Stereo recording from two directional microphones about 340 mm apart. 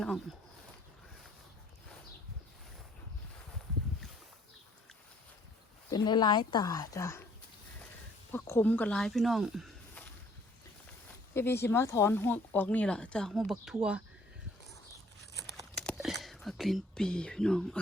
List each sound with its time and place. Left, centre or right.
0.0 s speech: centre
5.9 s a woman's voice: centre
8.3 s speech: centre
11.3 s speech: centre
15.7 s whispering: centre